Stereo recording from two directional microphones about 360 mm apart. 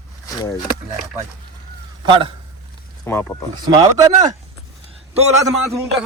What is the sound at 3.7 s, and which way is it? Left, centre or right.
Speech, centre.